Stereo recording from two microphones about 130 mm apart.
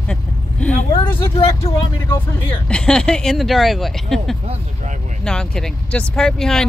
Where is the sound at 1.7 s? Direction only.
50° left (ahead or behind).